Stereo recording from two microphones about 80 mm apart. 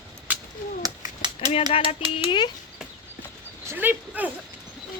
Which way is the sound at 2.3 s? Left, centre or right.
Left.